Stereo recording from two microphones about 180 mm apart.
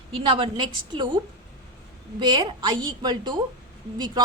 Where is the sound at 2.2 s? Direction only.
25° right (ahead or behind).